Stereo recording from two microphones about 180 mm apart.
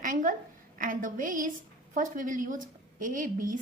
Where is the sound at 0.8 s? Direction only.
50° right (ahead or behind).